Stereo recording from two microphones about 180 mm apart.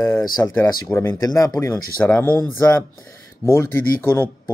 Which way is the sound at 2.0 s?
10° left (ahead or behind).